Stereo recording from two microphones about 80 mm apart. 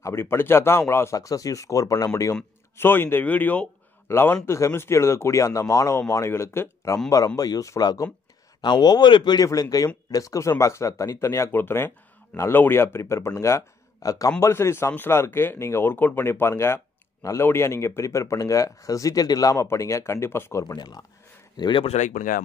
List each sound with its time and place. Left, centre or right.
0.0 s speech: left
2.8 s speech: left
7.1 s speech: left
8.5 s speech: left
9.5 s speech: left
14.4 s speech: left
20.6 s speech: left
21.5 s speech: left